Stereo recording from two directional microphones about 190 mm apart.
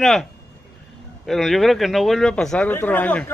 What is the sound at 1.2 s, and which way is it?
Speech, centre (ahead or behind).